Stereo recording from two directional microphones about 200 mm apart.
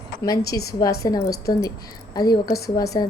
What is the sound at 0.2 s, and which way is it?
A woman's voice, 15° left (ahead or behind).